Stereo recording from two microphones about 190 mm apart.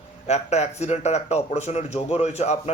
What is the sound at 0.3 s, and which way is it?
Speech, 35° left (ahead or behind).